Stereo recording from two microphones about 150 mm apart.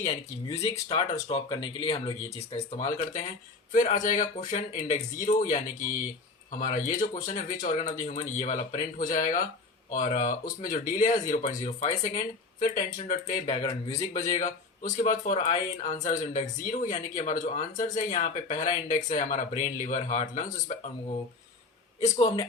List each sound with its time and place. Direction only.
0.6 s speech: 40° left (ahead or behind)
2.7 s speech: 55° left (ahead or behind)
6.6 s speech: 55° left (ahead or behind)
13.6 s speech: 30° left (ahead or behind)
14.1 s speech: 50° left (ahead or behind)
22.0 s speech: 40° left (ahead or behind)